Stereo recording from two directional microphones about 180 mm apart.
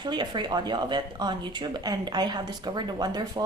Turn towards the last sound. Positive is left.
turn(degrees=-20)  # may be behind; listen again after turning